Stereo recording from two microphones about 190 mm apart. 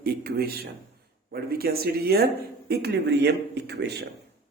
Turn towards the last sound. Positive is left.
turn(degrees=-60)  # may be behind; listen again after turning